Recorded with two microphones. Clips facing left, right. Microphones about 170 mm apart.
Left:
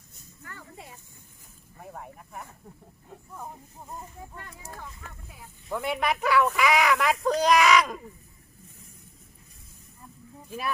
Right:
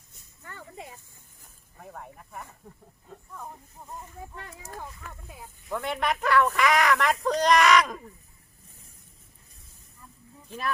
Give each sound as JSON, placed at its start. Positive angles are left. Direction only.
{"t": 0.4, "sound": "a sound", "side_deg": -25}
{"t": 1.8, "sound": "speech", "side_deg": 5}
{"t": 5.7, "sound": "speech", "side_deg": 5}